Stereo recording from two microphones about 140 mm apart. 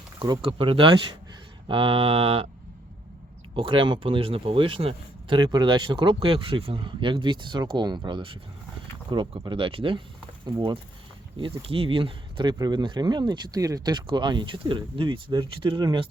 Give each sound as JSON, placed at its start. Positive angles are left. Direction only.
{"t": 0.2, "sound": "speech", "side_deg": -40}
{"t": 3.5, "sound": "speech", "side_deg": -40}